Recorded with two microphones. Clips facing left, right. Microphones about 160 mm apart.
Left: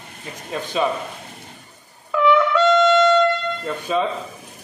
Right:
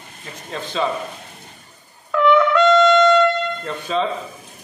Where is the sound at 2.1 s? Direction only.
5° left (ahead or behind).